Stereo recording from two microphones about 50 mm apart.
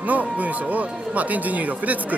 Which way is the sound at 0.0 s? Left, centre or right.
Right.